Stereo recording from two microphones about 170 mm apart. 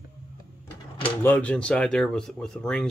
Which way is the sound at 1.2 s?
10° left (ahead or behind).